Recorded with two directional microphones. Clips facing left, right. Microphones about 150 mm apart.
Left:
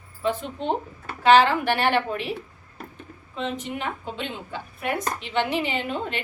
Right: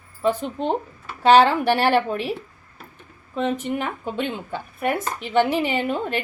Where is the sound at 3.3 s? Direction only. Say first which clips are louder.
Right 6 dB; 50° right (ahead or behind).